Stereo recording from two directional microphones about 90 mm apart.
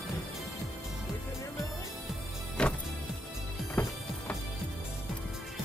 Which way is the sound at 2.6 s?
10° left (ahead or behind).